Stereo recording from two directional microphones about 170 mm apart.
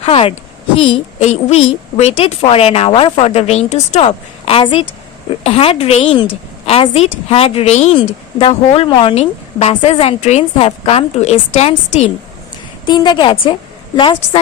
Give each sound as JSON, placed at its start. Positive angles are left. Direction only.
{"t": 0.0, "sound": "a woman's voice", "side_deg": 35}
{"t": 12.8, "sound": "a woman's voice", "side_deg": 25}